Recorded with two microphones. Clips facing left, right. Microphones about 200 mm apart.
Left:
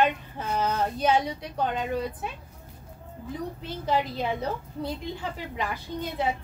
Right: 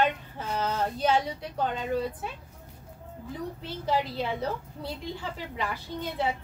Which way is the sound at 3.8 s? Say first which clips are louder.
Left 1 dB; 15° left (ahead or behind).